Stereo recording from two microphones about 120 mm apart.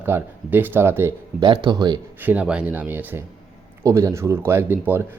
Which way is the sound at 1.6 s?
35° right (ahead or behind).